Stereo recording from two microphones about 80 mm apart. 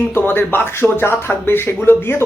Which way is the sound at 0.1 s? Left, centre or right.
Left.